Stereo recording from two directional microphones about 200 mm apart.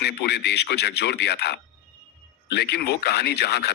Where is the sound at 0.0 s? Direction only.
55° left (ahead or behind).